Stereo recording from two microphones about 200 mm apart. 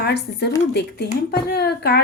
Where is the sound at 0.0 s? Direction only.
55° left (ahead or behind).